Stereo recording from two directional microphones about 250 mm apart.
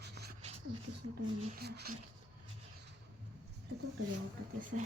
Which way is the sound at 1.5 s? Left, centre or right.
Right.